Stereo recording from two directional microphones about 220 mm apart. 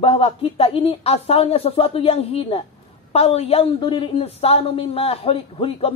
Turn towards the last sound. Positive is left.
turn(degrees=25)  # may be behind; listen again after turning